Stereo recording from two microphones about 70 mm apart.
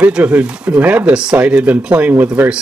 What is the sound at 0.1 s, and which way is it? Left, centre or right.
A man's voice, centre.